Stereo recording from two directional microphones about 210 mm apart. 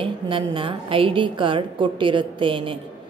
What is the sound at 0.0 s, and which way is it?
A woman's voice, 25° right (ahead or behind).